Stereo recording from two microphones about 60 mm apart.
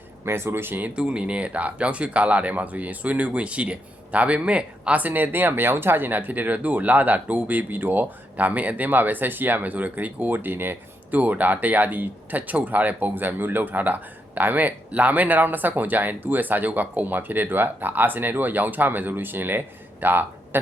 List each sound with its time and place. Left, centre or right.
0.3 s speech: right
0.9 s speech: centre; by 20.6 s right